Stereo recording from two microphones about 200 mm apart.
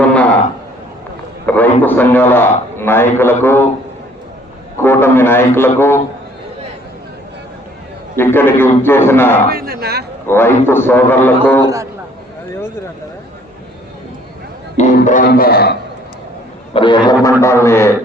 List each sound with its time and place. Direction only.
1.5 s a sound: 10° left (ahead or behind)
1.8 s a man's voice: 10° left (ahead or behind)
4.8 s a man's voice: 10° left (ahead or behind)
8.1 s a man's voice: 10° left (ahead or behind)
9.5 s a man's voice: 50° right (ahead or behind)
10.2 s a man's voice: 10° left (ahead or behind)
11.6 s a man's voice: 15° right (ahead or behind)
14.9 s a man's voice: 40° left (ahead or behind)
16.7 s a man's voice: 25° left (ahead or behind)